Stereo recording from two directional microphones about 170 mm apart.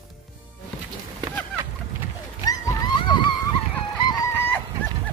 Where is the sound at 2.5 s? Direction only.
20° left (ahead or behind).